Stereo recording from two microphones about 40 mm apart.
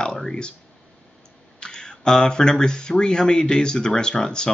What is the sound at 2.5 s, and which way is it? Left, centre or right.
Speech, centre.